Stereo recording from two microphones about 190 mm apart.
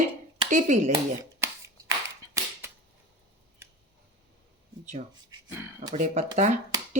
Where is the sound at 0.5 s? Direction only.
40° right (ahead or behind).